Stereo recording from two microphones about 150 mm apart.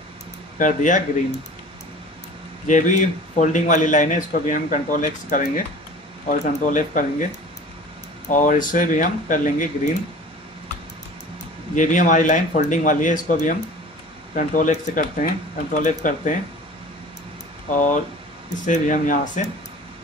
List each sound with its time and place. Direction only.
0.6 s a man's voice: 55° left (ahead or behind)
2.6 s a man's voice: 55° left (ahead or behind)
8.3 s a man's voice: 60° left (ahead or behind)
11.7 s a man's voice: 55° left (ahead or behind)
17.6 s a man's voice: 55° left (ahead or behind)